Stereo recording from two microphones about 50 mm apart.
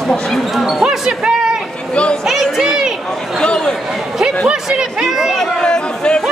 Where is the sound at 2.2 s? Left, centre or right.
Centre.